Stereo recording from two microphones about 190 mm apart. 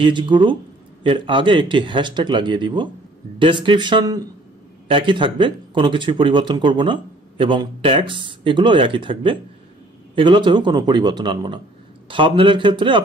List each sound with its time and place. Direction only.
0.0 s speech: 25° right (ahead or behind)